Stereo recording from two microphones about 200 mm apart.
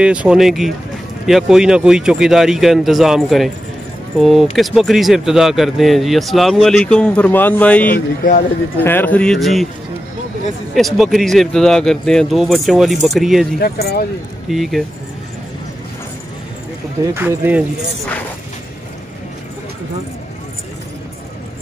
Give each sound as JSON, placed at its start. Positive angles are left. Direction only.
{"t": 0.0, "sound": "speech", "side_deg": -5}
{"t": 8.2, "sound": "speech", "side_deg": 45}
{"t": 8.7, "sound": "speech", "side_deg": 10}
{"t": 10.7, "sound": "speech", "side_deg": 0}
{"t": 17.0, "sound": "speech", "side_deg": -15}